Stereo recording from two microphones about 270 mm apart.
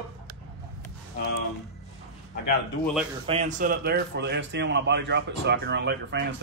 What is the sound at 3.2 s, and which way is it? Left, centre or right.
A man's voice, right.